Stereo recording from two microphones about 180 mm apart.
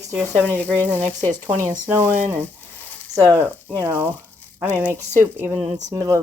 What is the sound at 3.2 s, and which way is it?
Speech, 15° right (ahead or behind).